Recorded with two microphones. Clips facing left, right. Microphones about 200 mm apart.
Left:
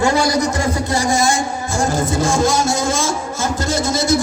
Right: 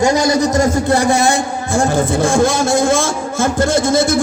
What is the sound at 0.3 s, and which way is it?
Speech, 35° right (ahead or behind).